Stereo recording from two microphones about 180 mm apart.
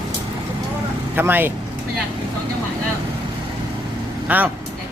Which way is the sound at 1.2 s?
10° right (ahead or behind).